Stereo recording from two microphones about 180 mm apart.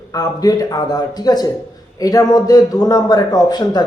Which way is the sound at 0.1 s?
20° left (ahead or behind).